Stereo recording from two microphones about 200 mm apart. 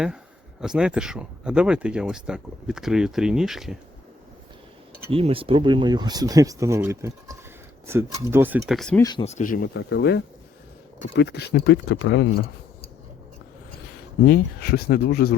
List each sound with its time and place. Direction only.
0.6 s speech: 5° right (ahead or behind)
5.1 s speech: 25° right (ahead or behind); by 9.0 s centre (ahead or behind)
9.0 s speech: 20° left (ahead or behind)
9.2 s speech: 35° left (ahead or behind); by 12.3 s 60° left (ahead or behind)
14.3 s speech: 50° left (ahead or behind)